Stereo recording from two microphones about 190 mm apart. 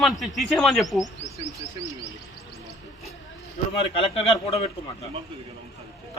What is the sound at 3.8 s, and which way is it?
Speech, 30° left (ahead or behind).